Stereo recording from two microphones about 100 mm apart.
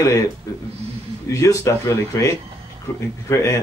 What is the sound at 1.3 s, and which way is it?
Speech, 30° left (ahead or behind).